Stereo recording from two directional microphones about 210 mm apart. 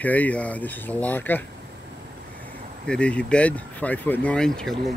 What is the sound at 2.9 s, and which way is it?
Speech, 5° left (ahead or behind).